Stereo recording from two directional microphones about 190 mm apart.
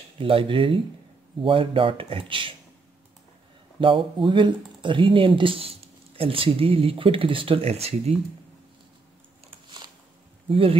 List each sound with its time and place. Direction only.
0.2 s speech: 30° right (ahead or behind)
3.8 s speech: 25° right (ahead or behind)
10.5 s speech: 30° right (ahead or behind)